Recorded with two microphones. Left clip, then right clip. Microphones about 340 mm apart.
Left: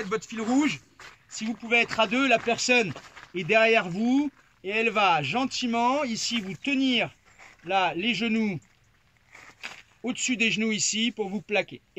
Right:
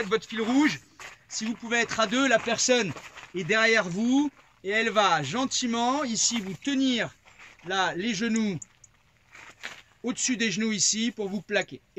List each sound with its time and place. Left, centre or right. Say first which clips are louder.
0.1 s speech: left 1 dB; centre
9.6 s speech: left 1 dB; centre